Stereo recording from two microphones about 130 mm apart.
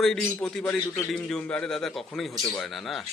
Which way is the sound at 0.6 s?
15° left (ahead or behind).